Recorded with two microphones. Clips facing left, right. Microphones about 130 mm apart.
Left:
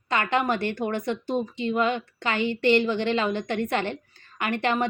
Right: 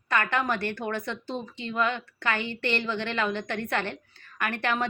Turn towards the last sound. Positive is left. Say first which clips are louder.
# left 3 dB
turn(degrees=20)  # may be behind; listen again after turning